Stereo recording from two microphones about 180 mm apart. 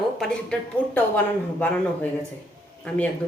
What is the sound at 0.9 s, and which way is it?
Speech, 10° left (ahead or behind).